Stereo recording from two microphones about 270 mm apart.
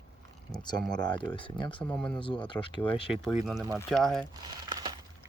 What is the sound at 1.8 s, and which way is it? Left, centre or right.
Speech, centre.